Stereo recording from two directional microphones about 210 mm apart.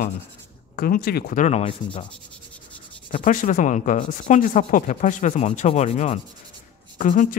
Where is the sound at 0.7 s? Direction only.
45° left (ahead or behind).